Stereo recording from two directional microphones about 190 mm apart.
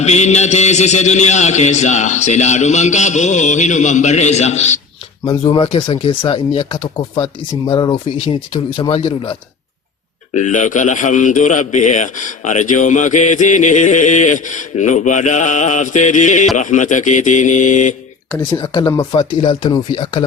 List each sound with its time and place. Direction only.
0.0 s a man's voice: 35° left (ahead or behind)
10.3 s a man's voice: 40° left (ahead or behind)
18.5 s speech: 25° left (ahead or behind)